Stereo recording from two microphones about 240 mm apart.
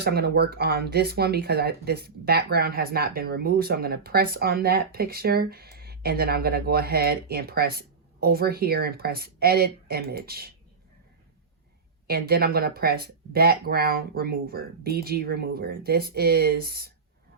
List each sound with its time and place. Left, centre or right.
0.0 s speech: right
12.0 s speech: right